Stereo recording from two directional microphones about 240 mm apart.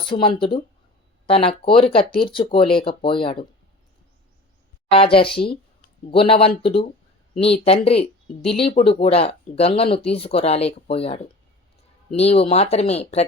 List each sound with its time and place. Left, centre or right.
0.2 s speech: left
4.9 s speech: left